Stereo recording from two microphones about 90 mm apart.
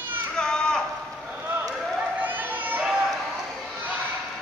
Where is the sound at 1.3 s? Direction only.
20° right (ahead or behind).